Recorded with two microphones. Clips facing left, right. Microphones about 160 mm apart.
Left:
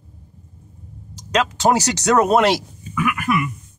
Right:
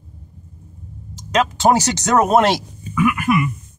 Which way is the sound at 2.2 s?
50° right (ahead or behind).